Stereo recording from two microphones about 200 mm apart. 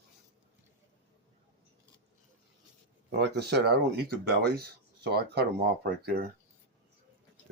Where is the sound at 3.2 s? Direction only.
55° right (ahead or behind).